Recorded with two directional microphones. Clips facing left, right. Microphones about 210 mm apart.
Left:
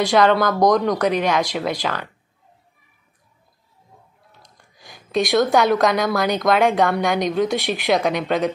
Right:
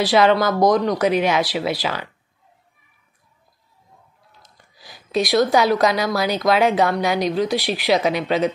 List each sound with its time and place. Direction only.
0.0 s a woman's voice: 5° right (ahead or behind)
4.4 s a woman's voice: 5° right (ahead or behind)